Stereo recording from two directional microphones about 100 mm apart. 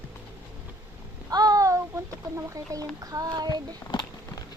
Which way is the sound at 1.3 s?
40° right (ahead or behind).